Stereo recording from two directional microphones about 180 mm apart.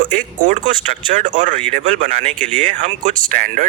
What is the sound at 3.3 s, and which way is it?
Speech, 50° right (ahead or behind).